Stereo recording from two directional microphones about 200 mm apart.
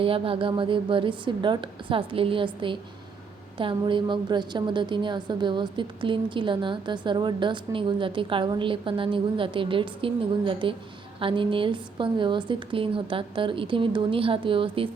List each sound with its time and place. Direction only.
0.0 s a woman's voice: 25° right (ahead or behind)